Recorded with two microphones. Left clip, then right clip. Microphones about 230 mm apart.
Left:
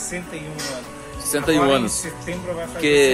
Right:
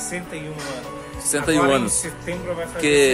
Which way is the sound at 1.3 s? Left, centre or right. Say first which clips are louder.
Left 1 dB; centre.